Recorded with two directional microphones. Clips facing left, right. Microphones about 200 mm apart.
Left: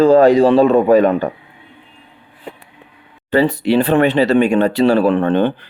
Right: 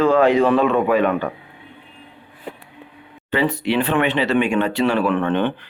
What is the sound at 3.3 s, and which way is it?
Speech, 35° left (ahead or behind).